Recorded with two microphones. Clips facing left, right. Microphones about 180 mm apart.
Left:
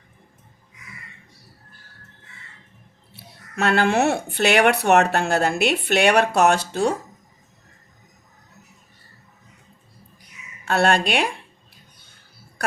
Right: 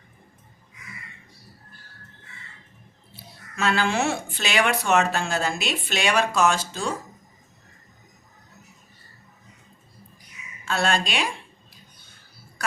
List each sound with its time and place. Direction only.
3.1 s speech: 65° left (ahead or behind)
10.7 s speech: 60° left (ahead or behind)